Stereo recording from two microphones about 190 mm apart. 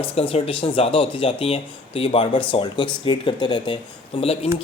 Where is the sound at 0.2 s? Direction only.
30° left (ahead or behind).